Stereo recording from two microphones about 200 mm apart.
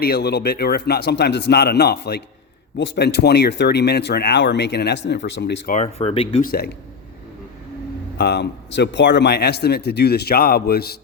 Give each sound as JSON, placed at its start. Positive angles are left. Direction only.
{"t": 0.0, "sound": "a man's voice", "side_deg": 55}
{"t": 5.7, "sound": "speech", "side_deg": 30}
{"t": 6.4, "sound": "a man's voice", "side_deg": 50}
{"t": 8.2, "sound": "speech", "side_deg": 55}